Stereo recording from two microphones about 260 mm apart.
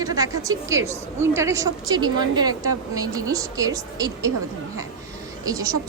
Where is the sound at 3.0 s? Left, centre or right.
Centre.